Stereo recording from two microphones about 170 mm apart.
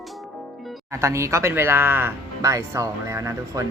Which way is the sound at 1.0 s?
15° right (ahead or behind).